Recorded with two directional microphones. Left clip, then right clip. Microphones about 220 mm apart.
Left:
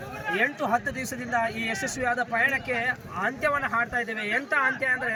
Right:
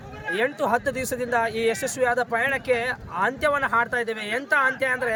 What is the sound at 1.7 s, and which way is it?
Speech, 25° right (ahead or behind).